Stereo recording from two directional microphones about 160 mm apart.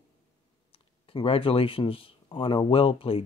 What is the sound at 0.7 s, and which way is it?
Speech, 35° left (ahead or behind).